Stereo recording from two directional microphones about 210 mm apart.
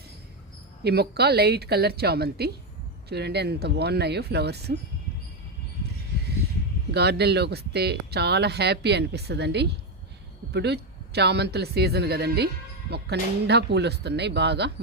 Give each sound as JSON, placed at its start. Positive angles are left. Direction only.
{"t": 0.9, "sound": "speech", "side_deg": -50}
{"t": 6.9, "sound": "speech", "side_deg": -50}